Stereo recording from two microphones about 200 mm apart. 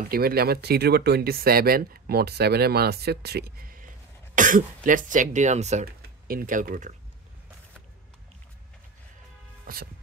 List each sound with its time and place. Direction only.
0.1 s speech: 50° right (ahead or behind)
5.9 s speech: 50° right (ahead or behind)
9.7 s speech: 45° right (ahead or behind)